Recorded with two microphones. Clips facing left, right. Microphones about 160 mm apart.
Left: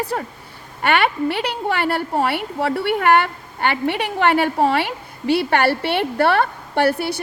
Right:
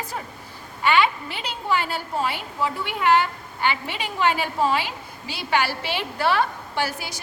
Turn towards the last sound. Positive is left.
turn(degrees=60)  # may be behind; listen again after turning